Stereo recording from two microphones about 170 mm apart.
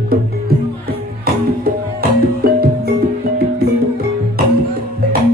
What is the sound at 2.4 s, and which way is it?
Music, 60° right (ahead or behind).